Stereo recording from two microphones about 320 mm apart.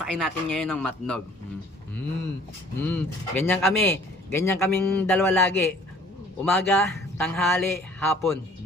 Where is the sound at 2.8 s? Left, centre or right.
Centre.